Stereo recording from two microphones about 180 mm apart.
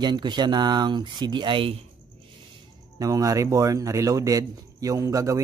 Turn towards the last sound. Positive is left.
turn(degrees=-20)  # may be behind; listen again after turning